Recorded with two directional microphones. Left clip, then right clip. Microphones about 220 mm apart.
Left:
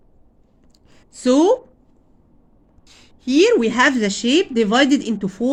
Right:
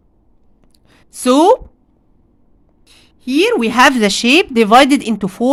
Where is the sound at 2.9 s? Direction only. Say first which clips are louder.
Right 1 dB; 15° right (ahead or behind).